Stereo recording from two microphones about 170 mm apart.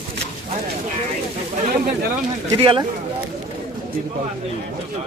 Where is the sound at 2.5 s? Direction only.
30° right (ahead or behind).